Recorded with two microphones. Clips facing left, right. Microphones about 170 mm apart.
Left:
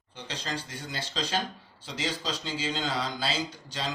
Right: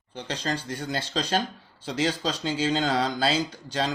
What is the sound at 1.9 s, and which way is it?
Speech, 50° right (ahead or behind).